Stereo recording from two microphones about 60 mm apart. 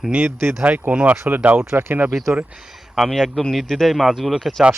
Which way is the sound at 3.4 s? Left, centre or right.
Centre.